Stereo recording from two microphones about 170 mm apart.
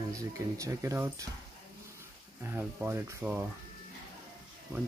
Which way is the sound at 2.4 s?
15° right (ahead or behind).